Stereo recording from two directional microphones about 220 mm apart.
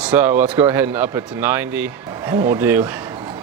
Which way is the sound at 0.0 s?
10° right (ahead or behind).